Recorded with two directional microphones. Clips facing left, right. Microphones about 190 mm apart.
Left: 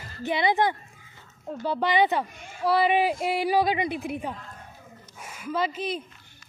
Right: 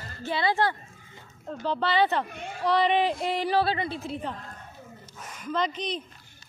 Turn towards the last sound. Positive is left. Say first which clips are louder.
# left 1 dB
turn(degrees=5)  # may be behind; listen again after turning